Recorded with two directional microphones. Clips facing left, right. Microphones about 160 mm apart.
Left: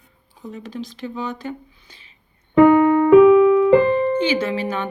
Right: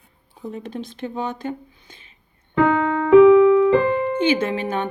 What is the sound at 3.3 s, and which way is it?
Keyboard, 15° left (ahead or behind).